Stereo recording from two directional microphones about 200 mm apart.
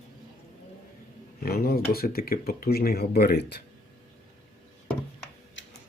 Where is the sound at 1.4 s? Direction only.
50° left (ahead or behind).